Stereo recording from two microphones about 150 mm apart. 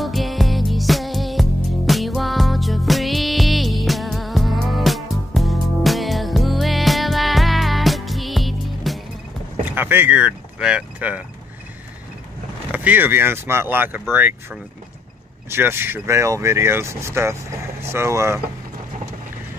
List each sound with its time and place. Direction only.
0.0 s music: centre (ahead or behind)
9.7 s speech: 15° right (ahead or behind)
12.7 s speech: 10° right (ahead or behind)